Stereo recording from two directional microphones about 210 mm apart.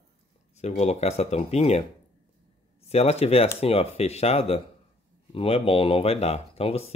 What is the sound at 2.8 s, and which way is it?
Speech, 30° left (ahead or behind).